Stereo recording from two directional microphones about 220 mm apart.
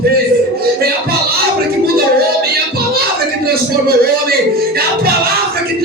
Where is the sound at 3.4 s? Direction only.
45° right (ahead or behind).